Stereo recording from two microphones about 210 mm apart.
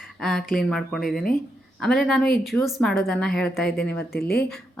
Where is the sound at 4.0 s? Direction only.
45° left (ahead or behind).